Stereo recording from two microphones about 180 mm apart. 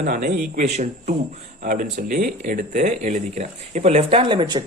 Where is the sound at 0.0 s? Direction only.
50° right (ahead or behind).